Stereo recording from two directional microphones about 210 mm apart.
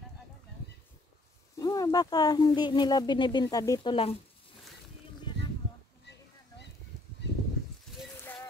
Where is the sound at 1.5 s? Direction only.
15° left (ahead or behind).